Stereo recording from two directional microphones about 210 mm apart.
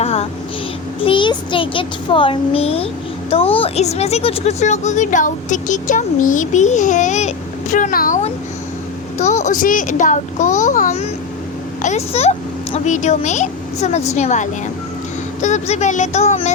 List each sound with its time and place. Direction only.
0.0 s vehicle: 30° left (ahead or behind)
1.0 s a child's voice: 25° left (ahead or behind)